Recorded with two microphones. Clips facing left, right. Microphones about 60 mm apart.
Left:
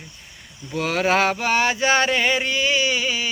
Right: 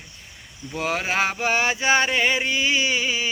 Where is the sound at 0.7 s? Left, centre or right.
Centre.